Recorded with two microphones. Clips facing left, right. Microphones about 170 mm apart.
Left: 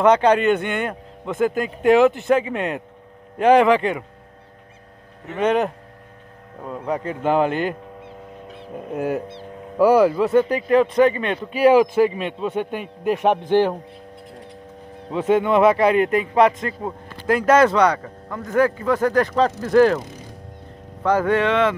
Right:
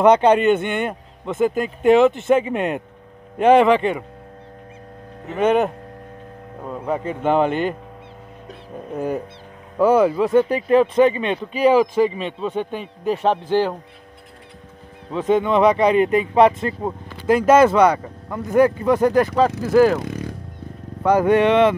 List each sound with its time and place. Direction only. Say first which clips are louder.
0.2 s a man's voice: right 2 dB; 5° right (ahead or behind)
3.4 s a man's voice: right 1 dB; centre (ahead or behind)
5.3 s a man's voice: right 2 dB; 5° right (ahead or behind)
8.9 s a man's voice: even; 5° left (ahead or behind)
10.0 s a man's voice: even; 15° right (ahead or behind)
10.5 s speech: right 1 dB; 25° right (ahead or behind)
11.5 s a man's voice: left 1 dB; 10° left (ahead or behind)
15.0 s a man's voice: even; 10° left (ahead or behind)
16.1 s speech: right 2 dB; 25° right (ahead or behind)
17.5 s a man's voice: right 2 dB; 10° right (ahead or behind)
20.0 s music: right 8 dB; 65° right (ahead or behind)
21.0 s a man's voice: right 3 dB; 15° right (ahead or behind)